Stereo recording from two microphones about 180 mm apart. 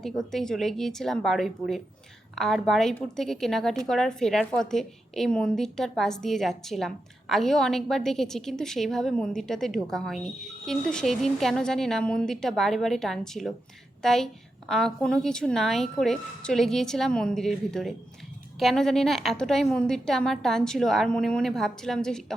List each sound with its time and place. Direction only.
0.0 s a woman's voice: centre (ahead or behind)